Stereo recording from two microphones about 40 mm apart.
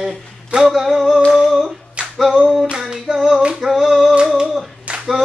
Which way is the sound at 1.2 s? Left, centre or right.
Centre.